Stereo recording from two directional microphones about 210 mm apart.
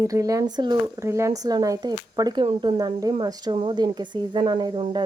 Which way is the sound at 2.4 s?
30° right (ahead or behind).